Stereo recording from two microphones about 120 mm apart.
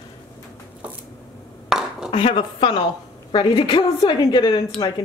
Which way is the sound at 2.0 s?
50° left (ahead or behind).